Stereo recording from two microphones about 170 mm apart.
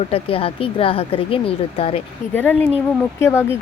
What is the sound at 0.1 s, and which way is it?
Speech, 35° left (ahead or behind).